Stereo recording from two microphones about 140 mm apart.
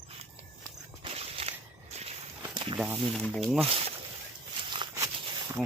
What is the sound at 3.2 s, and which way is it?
Speech, 5° left (ahead or behind).